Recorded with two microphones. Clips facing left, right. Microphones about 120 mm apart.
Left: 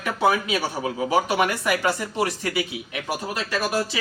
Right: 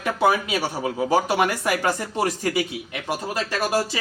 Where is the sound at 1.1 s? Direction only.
35° right (ahead or behind).